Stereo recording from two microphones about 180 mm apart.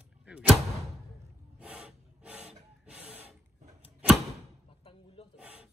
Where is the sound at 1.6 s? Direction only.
5° right (ahead or behind).